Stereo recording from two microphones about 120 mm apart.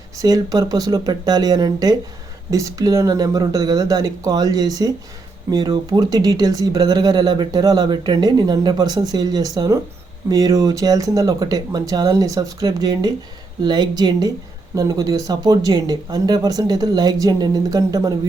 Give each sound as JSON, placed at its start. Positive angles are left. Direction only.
{"t": 0.2, "sound": "speech", "side_deg": -35}